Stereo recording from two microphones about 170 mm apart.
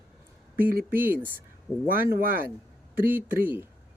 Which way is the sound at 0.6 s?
60° right (ahead or behind).